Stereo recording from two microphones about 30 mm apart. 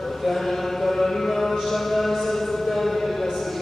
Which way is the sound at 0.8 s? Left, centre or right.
Centre.